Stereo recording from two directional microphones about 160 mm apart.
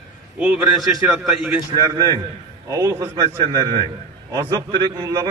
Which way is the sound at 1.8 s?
20° right (ahead or behind).